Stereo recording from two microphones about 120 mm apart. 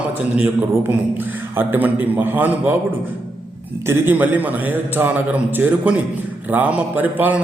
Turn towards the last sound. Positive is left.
turn(degrees=-15)  # may be behind; listen again after turning